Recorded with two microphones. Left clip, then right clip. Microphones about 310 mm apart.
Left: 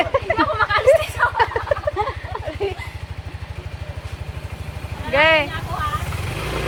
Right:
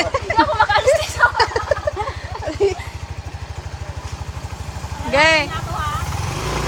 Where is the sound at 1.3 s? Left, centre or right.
Centre.